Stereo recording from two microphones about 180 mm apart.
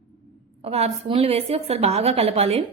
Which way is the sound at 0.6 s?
35° right (ahead or behind).